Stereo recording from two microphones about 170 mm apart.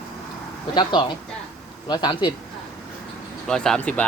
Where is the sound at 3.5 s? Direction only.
5° left (ahead or behind).